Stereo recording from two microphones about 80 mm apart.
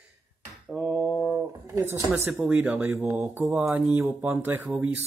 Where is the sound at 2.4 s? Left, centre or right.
Centre.